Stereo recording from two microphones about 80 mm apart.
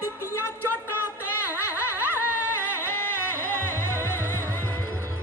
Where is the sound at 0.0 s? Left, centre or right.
Right.